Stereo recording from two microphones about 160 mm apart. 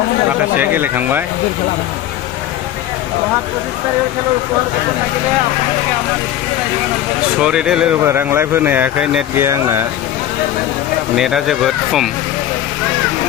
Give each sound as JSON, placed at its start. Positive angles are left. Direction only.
{"t": 0.6, "sound": "speech", "side_deg": -10}
{"t": 7.3, "sound": "speech", "side_deg": -5}
{"t": 8.0, "sound": "speech", "side_deg": -15}
{"t": 9.5, "sound": "speech", "side_deg": -20}
{"t": 11.1, "sound": "speech", "side_deg": 0}